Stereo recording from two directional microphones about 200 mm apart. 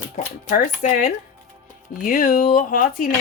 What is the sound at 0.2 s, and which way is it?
Speech, 40° left (ahead or behind).